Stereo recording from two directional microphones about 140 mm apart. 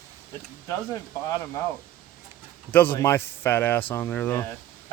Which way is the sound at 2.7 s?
15° left (ahead or behind).